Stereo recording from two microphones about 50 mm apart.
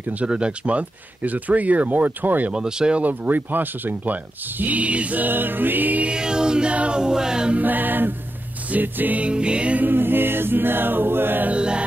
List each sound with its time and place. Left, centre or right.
0.0 s speech: right
2.5 s music: centre
3.0 s speech: right
6.0 s music: centre
7.5 s speech: right
9.3 s music: right
9.8 s choir: right
11.5 s music: centre